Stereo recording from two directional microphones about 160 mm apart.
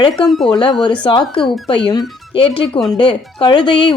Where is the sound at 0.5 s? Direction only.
30° left (ahead or behind).